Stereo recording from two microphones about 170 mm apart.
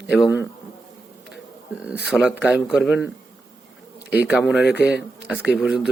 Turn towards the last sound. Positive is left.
turn(degrees=-5)  # may be behind; listen again after turning